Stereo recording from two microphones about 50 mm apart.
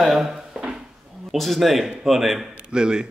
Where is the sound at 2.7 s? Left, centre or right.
Centre.